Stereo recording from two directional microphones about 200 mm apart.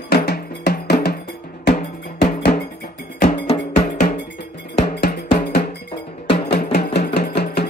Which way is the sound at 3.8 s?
40° left (ahead or behind).